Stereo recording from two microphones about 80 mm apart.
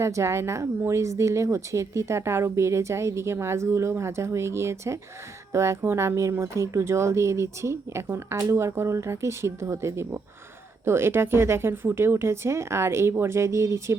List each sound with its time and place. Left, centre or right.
0.0 s a woman's voice: right